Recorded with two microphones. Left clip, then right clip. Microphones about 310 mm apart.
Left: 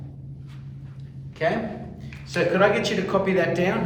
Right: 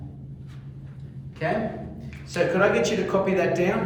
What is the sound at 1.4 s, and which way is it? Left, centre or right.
A man's voice, centre.